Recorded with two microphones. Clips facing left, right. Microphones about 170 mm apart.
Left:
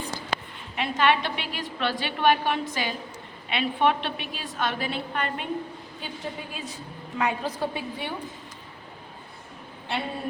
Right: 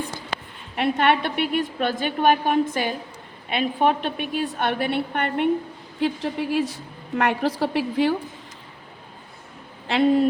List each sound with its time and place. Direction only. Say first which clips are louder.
0.8 s a woman's voice: right 3 dB; 60° right (ahead or behind)
3.5 s a woman's voice: right 3 dB; 45° right (ahead or behind); by 5.5 s 65° right (ahead or behind)
6.0 s a woman's voice: right 12 dB; 90° right
7.2 s a woman's voice: right 5 dB; 75° right (ahead or behind); by 8.1 s 90° right
9.8 s speech: right 13 dB; 90° right